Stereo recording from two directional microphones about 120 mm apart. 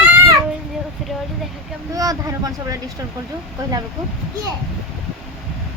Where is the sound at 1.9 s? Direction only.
30° right (ahead or behind).